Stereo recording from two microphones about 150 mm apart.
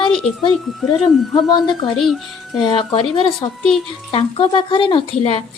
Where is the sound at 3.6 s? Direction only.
5° left (ahead or behind).